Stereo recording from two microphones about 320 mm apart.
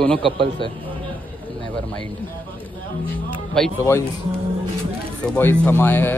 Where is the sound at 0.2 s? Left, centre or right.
Centre.